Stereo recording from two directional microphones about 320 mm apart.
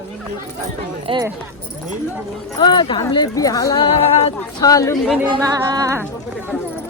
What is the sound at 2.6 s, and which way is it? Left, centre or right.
A woman's voice, centre.